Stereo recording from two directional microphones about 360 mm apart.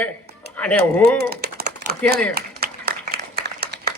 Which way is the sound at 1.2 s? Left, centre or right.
Right.